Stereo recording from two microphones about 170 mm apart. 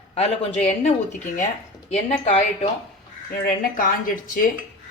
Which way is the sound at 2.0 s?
40° left (ahead or behind).